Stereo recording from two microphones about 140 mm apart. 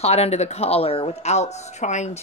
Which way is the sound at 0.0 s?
45° left (ahead or behind).